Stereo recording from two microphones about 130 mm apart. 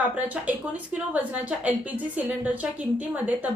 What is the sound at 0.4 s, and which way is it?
A woman's voice, 10° right (ahead or behind).